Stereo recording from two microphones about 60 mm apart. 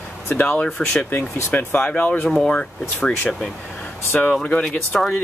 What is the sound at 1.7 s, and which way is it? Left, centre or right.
Speech, left.